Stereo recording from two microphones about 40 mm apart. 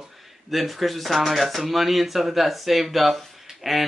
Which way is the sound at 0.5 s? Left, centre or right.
Centre.